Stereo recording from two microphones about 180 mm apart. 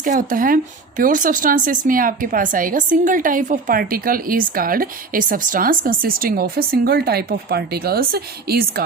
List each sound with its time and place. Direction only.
0.0 s speech: 50° right (ahead or behind)